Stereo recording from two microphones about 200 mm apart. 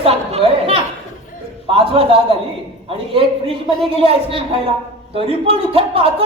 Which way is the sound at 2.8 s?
30° right (ahead or behind).